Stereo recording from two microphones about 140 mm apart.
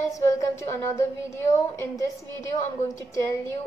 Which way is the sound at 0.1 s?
20° left (ahead or behind).